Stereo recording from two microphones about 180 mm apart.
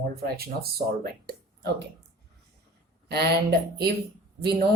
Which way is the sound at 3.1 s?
60° right (ahead or behind).